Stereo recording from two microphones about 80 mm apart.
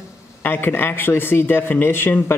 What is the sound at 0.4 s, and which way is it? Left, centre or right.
Speech, left.